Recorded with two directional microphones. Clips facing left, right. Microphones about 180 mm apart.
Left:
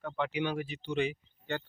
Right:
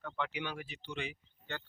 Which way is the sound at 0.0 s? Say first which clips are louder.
Left 6 dB; 15° left (ahead or behind).